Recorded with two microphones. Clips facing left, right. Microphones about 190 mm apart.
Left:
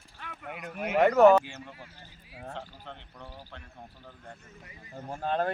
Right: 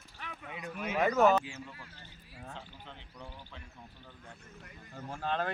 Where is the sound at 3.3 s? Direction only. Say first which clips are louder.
Left 3 dB; 40° left (ahead or behind).